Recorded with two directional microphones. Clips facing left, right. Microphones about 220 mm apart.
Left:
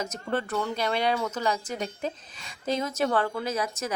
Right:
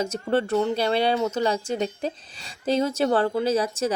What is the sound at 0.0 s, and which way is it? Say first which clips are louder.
Speech: right 6 dB; 30° right (ahead or behind).